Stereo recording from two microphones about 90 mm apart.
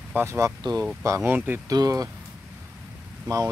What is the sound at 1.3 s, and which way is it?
Speech, 20° right (ahead or behind).